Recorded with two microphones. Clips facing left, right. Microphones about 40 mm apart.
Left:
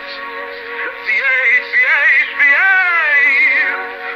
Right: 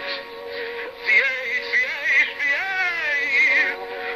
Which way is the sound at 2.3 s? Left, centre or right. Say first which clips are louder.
Left 12 dB; left.